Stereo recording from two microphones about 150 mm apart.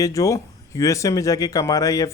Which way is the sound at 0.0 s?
20° left (ahead or behind).